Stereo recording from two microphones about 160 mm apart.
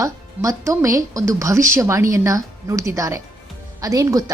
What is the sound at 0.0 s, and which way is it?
A woman's voice, 20° right (ahead or behind).